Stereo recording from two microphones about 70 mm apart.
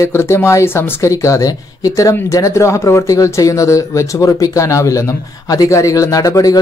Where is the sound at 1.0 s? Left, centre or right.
Left.